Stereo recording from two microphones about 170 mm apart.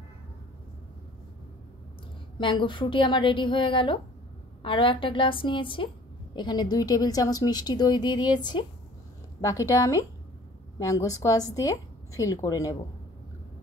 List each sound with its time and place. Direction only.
2.3 s a woman's voice: 30° left (ahead or behind)